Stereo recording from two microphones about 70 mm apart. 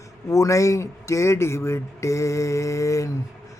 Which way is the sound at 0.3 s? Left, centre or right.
Left.